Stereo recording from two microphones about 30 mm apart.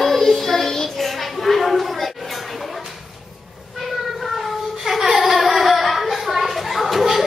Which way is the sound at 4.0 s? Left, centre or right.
Centre.